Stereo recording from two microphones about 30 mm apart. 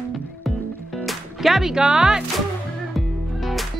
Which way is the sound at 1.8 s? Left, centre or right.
Right.